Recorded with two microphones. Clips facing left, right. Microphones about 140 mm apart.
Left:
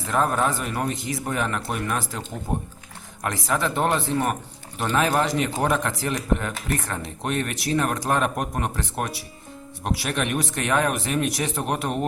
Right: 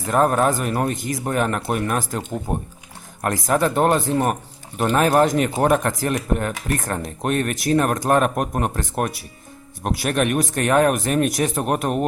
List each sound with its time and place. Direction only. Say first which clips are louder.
0.1 s speech: right 5 dB; 50° right (ahead or behind)